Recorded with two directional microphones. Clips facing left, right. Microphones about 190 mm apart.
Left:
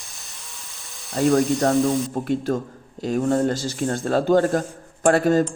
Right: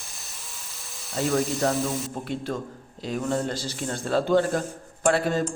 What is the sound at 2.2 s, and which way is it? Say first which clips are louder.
A man's voice: left 7 dB; 45° left (ahead or behind).